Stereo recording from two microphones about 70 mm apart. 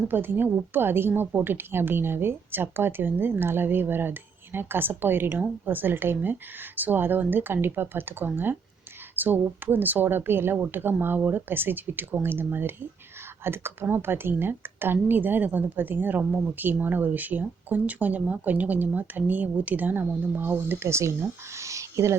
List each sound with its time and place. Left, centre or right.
0.1 s a woman's voice: right
20.8 s speech: right